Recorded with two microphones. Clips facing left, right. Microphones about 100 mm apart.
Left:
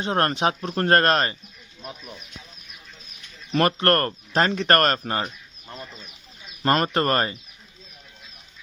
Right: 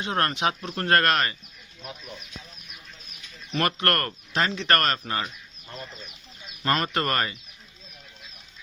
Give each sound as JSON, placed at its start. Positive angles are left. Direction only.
{"t": 0.0, "sound": "speech", "side_deg": 35}
{"t": 3.5, "sound": "speech", "side_deg": 35}
{"t": 5.9, "sound": "chicken", "side_deg": 0}
{"t": 6.6, "sound": "speech", "side_deg": 35}